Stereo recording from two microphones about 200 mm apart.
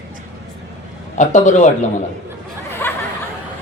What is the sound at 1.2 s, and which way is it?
Speech, 35° left (ahead or behind).